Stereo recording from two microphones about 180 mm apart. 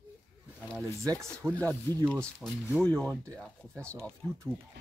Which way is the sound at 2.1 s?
15° right (ahead or behind).